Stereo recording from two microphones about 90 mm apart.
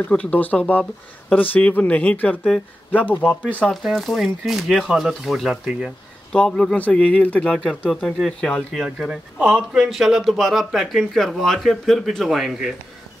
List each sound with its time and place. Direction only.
0.1 s speech: 15° left (ahead or behind)
3.6 s a man's voice: centre (ahead or behind)
6.3 s speech: 10° left (ahead or behind)
7.9 s a man's voice: 5° left (ahead or behind)
9.0 s a man's voice: 5° right (ahead or behind)